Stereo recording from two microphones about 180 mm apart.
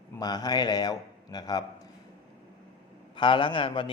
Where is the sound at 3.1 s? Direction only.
30° left (ahead or behind).